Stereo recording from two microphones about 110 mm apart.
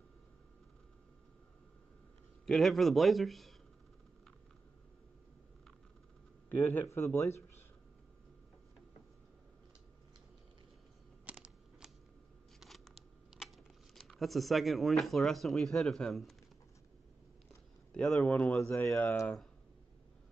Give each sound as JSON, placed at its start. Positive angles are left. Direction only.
{"t": 2.4, "sound": "speech", "side_deg": 5}
{"t": 6.5, "sound": "speech", "side_deg": 20}
{"t": 11.2, "sound": "a sound", "side_deg": -10}
{"t": 12.5, "sound": "scissors", "side_deg": 0}
{"t": 13.9, "sound": "speech", "side_deg": 0}
{"t": 17.9, "sound": "speech", "side_deg": 10}
{"t": 18.6, "sound": "speech", "side_deg": 25}